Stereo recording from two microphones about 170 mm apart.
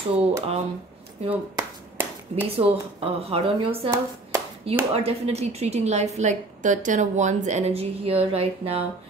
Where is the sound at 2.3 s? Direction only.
40° right (ahead or behind).